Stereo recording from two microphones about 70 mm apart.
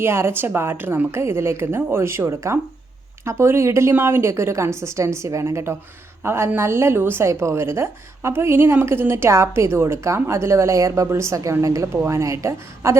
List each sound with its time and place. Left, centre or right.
0.0 s a woman's voice: right